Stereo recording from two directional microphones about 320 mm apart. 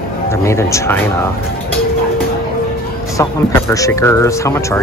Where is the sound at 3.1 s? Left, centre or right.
Centre.